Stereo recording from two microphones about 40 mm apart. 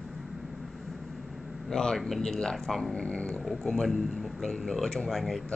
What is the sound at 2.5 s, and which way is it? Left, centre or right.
Speech, centre.